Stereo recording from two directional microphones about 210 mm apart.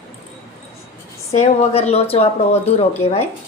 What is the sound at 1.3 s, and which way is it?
A woman's voice, 30° left (ahead or behind).